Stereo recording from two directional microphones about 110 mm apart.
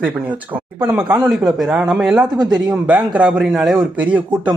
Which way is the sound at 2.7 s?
10° right (ahead or behind).